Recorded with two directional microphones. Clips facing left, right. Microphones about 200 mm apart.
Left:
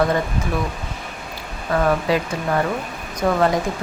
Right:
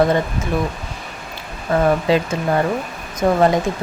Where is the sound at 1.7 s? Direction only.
25° right (ahead or behind).